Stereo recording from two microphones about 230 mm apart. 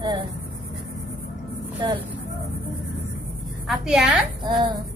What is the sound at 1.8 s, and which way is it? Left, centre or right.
Speech, centre.